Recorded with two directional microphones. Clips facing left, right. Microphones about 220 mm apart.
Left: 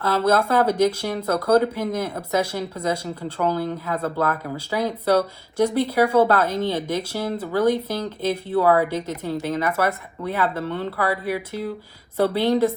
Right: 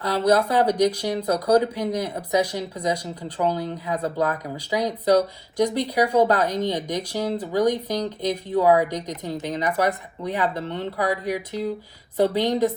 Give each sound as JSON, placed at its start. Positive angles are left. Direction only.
{"t": 0.0, "sound": "speech", "side_deg": -15}
{"t": 12.1, "sound": "a woman's voice", "side_deg": -15}